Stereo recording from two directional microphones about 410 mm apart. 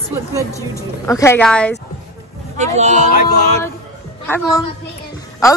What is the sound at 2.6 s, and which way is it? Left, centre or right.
Speech, centre.